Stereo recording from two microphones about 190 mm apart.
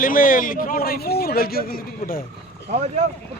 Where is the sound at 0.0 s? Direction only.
45° left (ahead or behind).